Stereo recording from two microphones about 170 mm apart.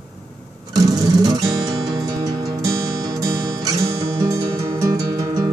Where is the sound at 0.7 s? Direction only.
20° right (ahead or behind).